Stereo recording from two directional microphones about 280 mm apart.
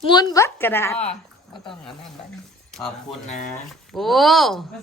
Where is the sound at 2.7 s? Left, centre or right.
Centre.